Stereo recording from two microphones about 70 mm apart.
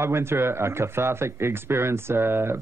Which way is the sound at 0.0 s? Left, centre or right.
Right.